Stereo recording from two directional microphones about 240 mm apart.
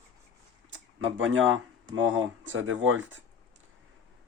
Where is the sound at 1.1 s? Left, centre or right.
Right.